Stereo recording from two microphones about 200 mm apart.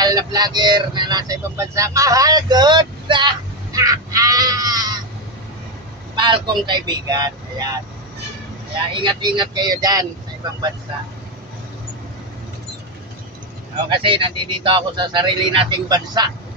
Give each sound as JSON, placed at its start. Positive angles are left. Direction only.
{"t": 0.0, "sound": "speech", "side_deg": -20}
{"t": 6.1, "sound": "speech", "side_deg": -25}
{"t": 8.9, "sound": "speech", "side_deg": -25}
{"t": 13.8, "sound": "speech", "side_deg": -25}